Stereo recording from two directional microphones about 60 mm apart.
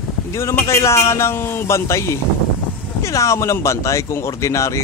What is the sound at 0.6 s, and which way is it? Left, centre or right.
A man's voice, left.